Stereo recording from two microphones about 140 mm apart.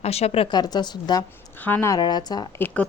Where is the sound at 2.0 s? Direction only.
30° left (ahead or behind).